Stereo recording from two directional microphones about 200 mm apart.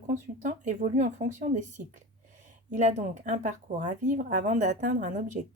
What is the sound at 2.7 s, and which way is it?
Speech, 40° right (ahead or behind).